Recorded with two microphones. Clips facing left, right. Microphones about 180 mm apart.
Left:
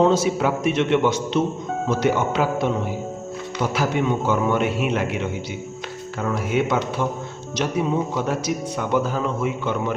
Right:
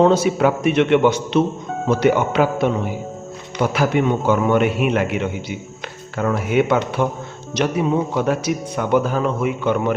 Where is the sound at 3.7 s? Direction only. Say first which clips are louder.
Right 3 dB; 60° right (ahead or behind).